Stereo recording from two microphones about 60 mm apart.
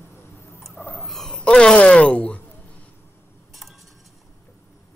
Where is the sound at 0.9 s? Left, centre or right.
Centre.